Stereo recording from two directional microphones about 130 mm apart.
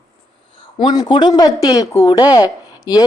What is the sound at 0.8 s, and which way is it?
Speech, 35° left (ahead or behind).